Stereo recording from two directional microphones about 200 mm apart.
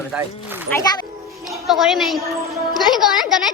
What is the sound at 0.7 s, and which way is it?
Speech, 15° left (ahead or behind).